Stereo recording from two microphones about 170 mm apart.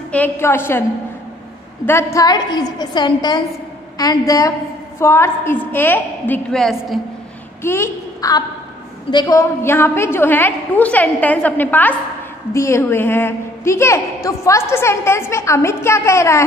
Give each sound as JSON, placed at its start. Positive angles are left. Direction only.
{"t": 0.1, "sound": "a woman's voice", "side_deg": 10}
{"t": 1.9, "sound": "a woman's voice", "side_deg": 15}
{"t": 7.6, "sound": "a woman's voice", "side_deg": 15}